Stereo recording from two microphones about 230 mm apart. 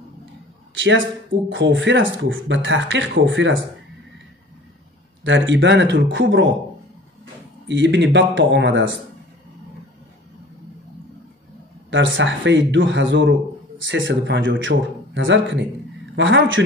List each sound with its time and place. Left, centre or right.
0.7 s a man's voice: right
5.2 s a man's voice: right
7.6 s a man's voice: right
11.9 s a man's voice: right